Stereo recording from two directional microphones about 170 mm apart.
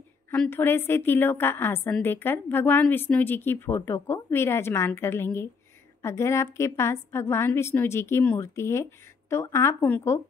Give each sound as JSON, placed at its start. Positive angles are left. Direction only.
{"t": 0.3, "sound": "a woman's voice", "side_deg": 10}